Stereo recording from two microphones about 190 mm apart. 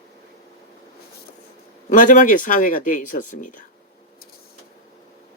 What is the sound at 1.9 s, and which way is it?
Speech, 45° left (ahead or behind).